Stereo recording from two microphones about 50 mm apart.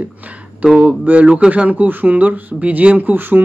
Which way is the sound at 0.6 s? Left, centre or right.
Centre.